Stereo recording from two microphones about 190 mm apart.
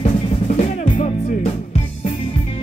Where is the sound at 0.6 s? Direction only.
35° left (ahead or behind).